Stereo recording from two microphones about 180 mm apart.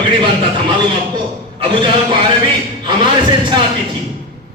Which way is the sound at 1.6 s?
25° right (ahead or behind).